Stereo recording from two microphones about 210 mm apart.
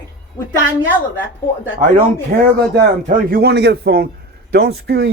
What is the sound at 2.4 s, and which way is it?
A man's voice, 50° right (ahead or behind).